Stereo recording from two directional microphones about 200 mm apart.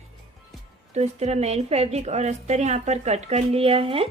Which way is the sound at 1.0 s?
30° right (ahead or behind).